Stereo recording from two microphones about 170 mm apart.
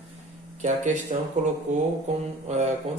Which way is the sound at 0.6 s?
45° right (ahead or behind).